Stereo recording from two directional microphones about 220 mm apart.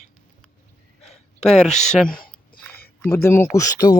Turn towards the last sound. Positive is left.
turn(degrees=10)  # may be behind; listen again after turning